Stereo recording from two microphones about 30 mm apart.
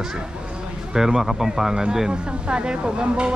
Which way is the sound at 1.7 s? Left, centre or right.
Right.